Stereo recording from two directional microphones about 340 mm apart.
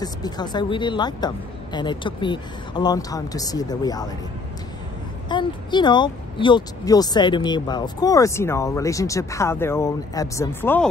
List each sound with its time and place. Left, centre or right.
0.0 s speech: centre
5.3 s speech: centre